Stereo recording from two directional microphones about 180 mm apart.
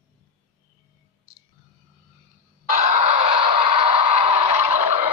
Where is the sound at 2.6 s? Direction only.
40° right (ahead or behind).